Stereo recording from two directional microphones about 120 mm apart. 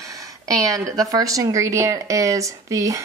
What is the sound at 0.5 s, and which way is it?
Speech, 30° right (ahead or behind).